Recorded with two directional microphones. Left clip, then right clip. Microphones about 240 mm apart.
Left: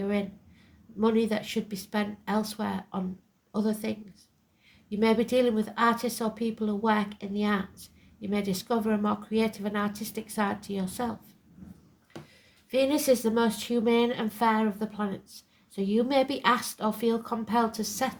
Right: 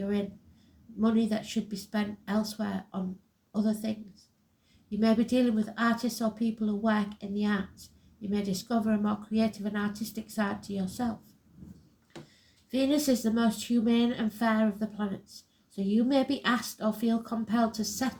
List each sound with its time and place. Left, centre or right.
0.0 s a sound: left
0.9 s speech: left
12.7 s speech: left